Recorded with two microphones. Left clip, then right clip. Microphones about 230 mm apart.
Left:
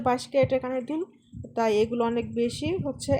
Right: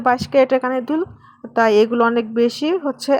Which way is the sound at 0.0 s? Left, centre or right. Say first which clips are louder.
Right 9 dB; right.